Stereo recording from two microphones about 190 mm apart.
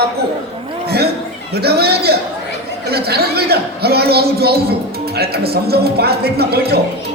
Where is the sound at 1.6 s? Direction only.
55° right (ahead or behind).